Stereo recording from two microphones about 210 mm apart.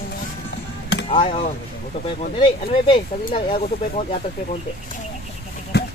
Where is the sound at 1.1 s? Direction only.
25° left (ahead or behind).